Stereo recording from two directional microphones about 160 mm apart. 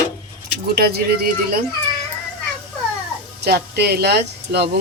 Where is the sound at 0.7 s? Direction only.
80° right.